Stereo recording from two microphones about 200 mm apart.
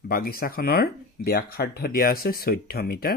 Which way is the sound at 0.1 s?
50° left (ahead or behind).